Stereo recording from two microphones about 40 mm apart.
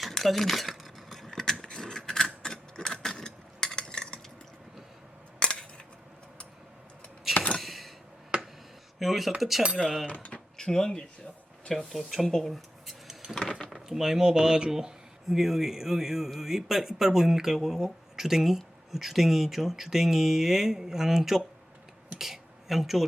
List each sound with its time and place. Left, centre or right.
0.0 s a sound: centre
1.9 s mechanisms: centre
5.4 s cutlery: left
7.5 s a sound: centre
9.0 s speech: centre
10.6 s speech: centre
13.3 s speech: left
13.8 s speech: centre
22.2 s a sound: centre